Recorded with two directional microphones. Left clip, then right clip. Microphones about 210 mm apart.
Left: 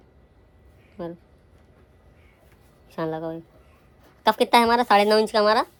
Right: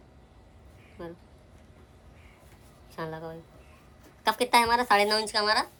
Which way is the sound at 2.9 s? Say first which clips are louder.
Left 8 dB; 25° left (ahead or behind).